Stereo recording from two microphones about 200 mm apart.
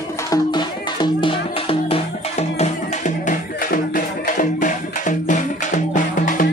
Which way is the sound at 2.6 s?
40° left (ahead or behind).